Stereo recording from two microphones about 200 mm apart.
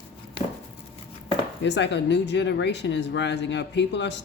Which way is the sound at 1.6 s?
60° left (ahead or behind).